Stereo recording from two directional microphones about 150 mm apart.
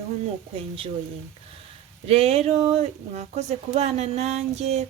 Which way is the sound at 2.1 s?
40° right (ahead or behind).